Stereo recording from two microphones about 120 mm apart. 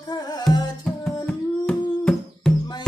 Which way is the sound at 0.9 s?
Centre (ahead or behind).